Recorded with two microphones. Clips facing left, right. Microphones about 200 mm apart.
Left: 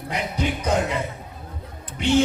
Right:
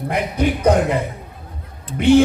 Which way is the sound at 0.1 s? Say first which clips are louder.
Right 6 dB; 55° right (ahead or behind).